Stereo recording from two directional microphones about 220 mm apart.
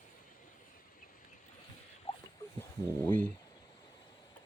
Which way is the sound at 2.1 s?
30° left (ahead or behind).